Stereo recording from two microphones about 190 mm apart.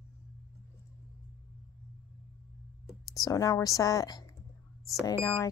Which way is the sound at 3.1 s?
20° left (ahead or behind).